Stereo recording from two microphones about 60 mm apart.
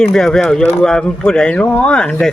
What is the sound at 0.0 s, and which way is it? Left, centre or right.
Speech, centre.